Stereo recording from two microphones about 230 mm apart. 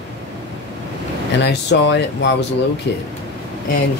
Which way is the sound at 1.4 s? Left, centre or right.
Left.